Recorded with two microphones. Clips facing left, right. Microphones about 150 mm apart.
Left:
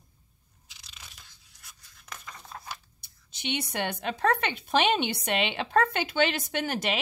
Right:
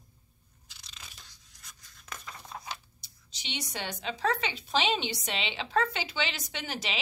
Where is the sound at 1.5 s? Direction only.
5° left (ahead or behind).